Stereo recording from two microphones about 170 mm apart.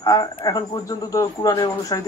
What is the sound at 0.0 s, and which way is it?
Speech, 20° left (ahead or behind).